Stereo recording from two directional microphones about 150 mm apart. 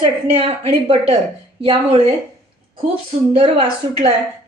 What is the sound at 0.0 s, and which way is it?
Speech, 35° right (ahead or behind).